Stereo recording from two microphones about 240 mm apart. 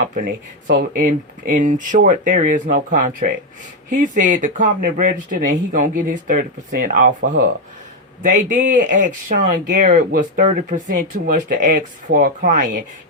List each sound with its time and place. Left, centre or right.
0.1 s speech: right